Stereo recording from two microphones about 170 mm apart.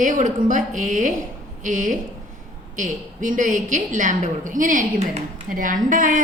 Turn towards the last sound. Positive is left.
turn(degrees=-50)  # may be behind; listen again after turning